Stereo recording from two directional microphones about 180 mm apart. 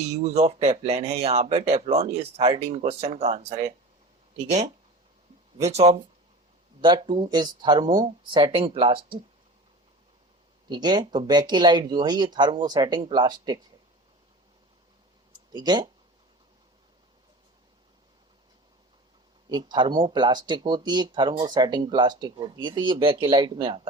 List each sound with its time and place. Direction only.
0.1 s speech: 35° right (ahead or behind)
5.6 s speech: 35° right (ahead or behind)
10.7 s speech: 25° right (ahead or behind)
15.5 s speech: 25° right (ahead or behind)
19.5 s speech: 25° right (ahead or behind)